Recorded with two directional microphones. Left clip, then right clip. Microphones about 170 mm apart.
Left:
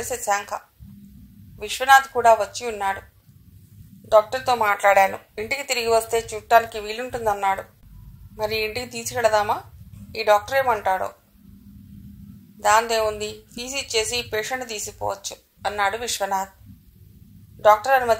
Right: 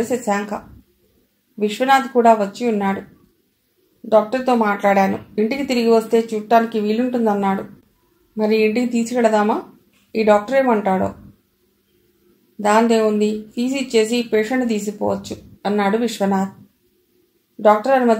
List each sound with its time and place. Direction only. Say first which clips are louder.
0.0 s speech: right 4 dB; 35° left (ahead or behind)
1.6 s speech: even; 40° left (ahead or behind)
4.1 s speech: right 2 dB; 40° left (ahead or behind)
12.5 s speech: right 3 dB; 40° left (ahead or behind)
17.6 s speech: right 2 dB; 40° left (ahead or behind)